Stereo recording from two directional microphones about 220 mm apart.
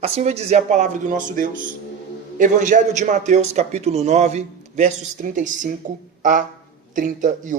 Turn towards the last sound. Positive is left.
turn(degrees=-35)  # may be behind; listen again after turning